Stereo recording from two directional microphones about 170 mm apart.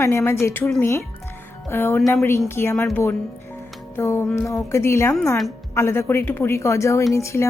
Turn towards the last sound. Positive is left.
turn(degrees=15)  # may be behind; listen again after turning